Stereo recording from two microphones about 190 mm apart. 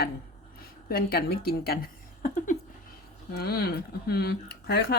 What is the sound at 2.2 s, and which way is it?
Speech, 40° left (ahead or behind).